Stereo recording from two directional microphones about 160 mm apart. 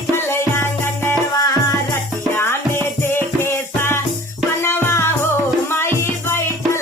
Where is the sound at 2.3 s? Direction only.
15° left (ahead or behind).